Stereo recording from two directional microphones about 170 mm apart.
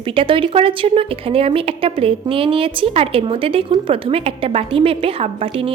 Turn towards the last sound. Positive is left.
turn(degrees=-35)  # may be behind; listen again after turning